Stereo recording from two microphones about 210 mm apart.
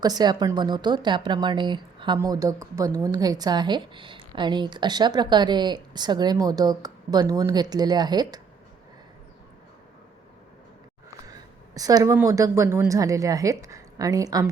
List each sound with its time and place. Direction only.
0.0 s a woman's voice: 20° right (ahead or behind)
11.3 s a woman's voice: 15° right (ahead or behind)